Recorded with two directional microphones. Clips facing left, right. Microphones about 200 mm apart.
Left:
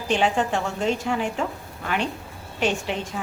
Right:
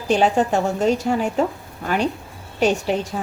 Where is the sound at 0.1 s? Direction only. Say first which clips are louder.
Right 5 dB; 40° right (ahead or behind).